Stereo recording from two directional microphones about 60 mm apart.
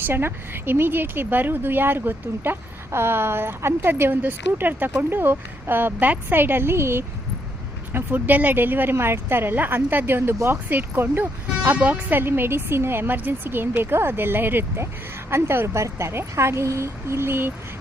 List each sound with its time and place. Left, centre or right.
0.0 s speech: right
7.9 s a woman's voice: right